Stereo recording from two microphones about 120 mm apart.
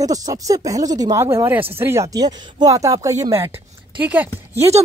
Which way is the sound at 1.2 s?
20° right (ahead or behind).